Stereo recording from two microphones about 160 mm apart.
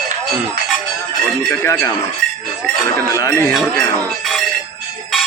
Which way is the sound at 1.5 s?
15° left (ahead or behind).